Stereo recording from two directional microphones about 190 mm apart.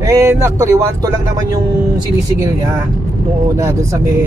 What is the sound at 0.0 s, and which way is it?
Speech, 15° right (ahead or behind).